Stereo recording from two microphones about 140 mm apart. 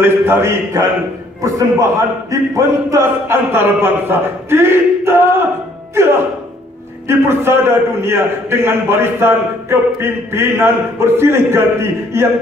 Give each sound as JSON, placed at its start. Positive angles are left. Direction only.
{"t": 0.0, "sound": "a man's voice", "side_deg": -20}